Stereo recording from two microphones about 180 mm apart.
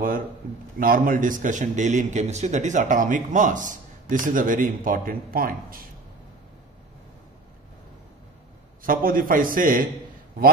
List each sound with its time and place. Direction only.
0.7 s a man's voice: 50° right (ahead or behind)
8.8 s a man's voice: 50° right (ahead or behind)